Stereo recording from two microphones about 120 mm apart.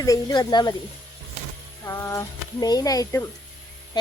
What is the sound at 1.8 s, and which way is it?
Speech, 25° left (ahead or behind).